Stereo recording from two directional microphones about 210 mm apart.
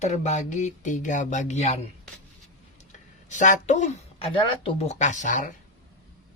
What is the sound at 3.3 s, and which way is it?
Speech, 35° left (ahead or behind).